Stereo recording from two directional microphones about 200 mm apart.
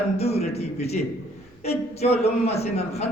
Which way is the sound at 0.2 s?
30° left (ahead or behind).